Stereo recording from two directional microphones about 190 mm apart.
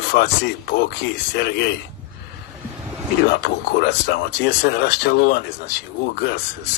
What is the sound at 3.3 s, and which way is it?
Speech, 60° left (ahead or behind).